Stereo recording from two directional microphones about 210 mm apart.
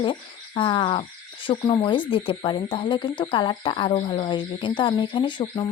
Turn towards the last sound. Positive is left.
turn(degrees=20)  # may be behind; listen again after turning